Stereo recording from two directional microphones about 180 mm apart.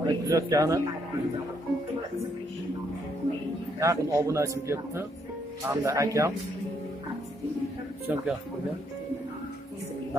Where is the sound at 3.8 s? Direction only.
15° right (ahead or behind).